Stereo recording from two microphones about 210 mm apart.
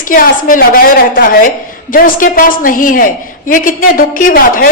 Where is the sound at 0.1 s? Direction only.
40° left (ahead or behind).